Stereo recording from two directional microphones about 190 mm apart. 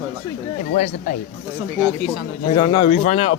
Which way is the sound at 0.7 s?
40° left (ahead or behind).